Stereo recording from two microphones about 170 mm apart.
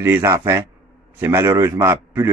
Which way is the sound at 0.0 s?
15° right (ahead or behind).